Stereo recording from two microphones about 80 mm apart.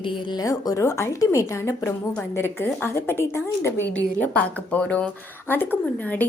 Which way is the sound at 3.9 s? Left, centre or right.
Centre.